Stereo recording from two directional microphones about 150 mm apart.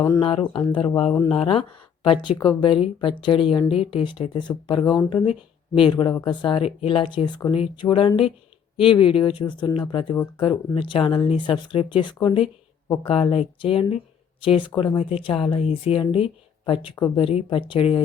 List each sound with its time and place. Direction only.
0.2 s speech: 35° left (ahead or behind)